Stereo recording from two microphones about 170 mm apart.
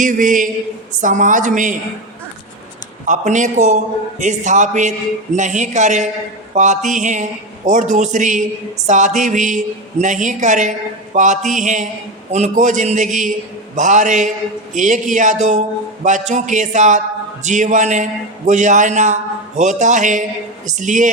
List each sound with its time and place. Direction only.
0.0 s a man's voice: 50° right (ahead or behind)
3.1 s a man's voice: 45° right (ahead or behind)